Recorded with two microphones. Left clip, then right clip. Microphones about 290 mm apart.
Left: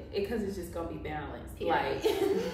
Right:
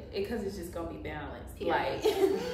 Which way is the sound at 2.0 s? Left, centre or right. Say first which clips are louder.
Right 2 dB; centre.